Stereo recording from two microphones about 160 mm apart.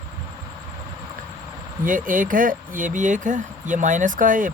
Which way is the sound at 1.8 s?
55° right (ahead or behind).